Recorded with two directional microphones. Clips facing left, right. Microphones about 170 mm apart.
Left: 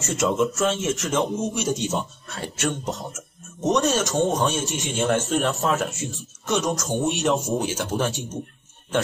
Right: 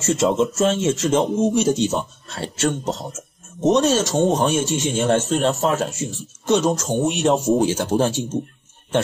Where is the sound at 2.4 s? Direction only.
25° right (ahead or behind).